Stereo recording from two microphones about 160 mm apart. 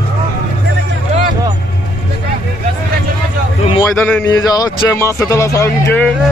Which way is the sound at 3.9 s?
5° left (ahead or behind).